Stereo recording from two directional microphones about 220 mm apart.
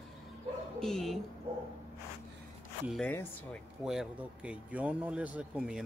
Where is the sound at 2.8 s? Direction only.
5° left (ahead or behind).